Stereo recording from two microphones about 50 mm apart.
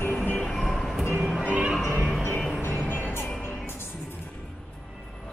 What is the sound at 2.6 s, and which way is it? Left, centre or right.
Music, left.